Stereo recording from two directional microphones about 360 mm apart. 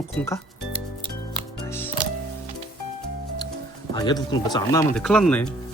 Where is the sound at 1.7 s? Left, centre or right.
Centre.